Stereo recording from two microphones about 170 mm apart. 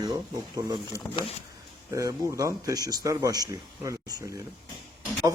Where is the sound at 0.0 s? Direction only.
25° right (ahead or behind).